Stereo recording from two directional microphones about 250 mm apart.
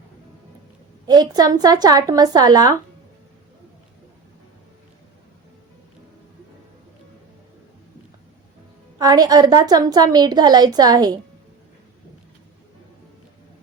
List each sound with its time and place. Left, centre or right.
1.0 s a woman's voice: centre
9.0 s a woman's voice: centre